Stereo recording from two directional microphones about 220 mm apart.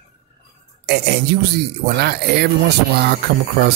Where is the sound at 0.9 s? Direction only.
50° right (ahead or behind).